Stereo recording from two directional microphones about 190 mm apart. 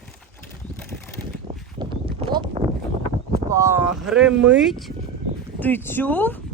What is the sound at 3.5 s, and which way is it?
Speech, 15° right (ahead or behind).